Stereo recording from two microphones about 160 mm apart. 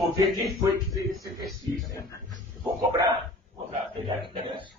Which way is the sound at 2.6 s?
20° right (ahead or behind).